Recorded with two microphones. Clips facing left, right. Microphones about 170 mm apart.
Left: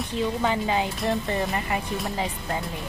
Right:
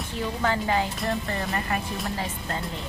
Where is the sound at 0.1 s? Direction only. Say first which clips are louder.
Left 1 dB; 20° left (ahead or behind).